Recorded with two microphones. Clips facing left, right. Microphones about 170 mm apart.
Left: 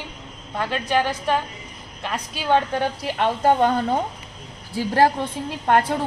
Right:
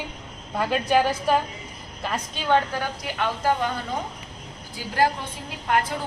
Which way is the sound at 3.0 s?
35° left (ahead or behind).